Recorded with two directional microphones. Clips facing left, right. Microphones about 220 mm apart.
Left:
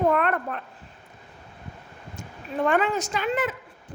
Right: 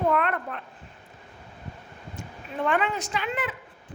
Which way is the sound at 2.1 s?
45° left (ahead or behind).